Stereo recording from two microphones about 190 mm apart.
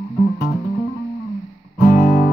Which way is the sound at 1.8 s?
50° left (ahead or behind).